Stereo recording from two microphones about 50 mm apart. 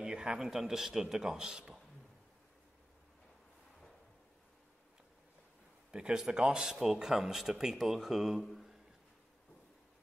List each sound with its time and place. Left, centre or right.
0.0 s a sound: centre
0.5 s speech: centre
5.9 s speech: centre